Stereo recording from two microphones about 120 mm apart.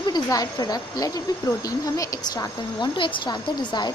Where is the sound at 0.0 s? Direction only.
35° left (ahead or behind).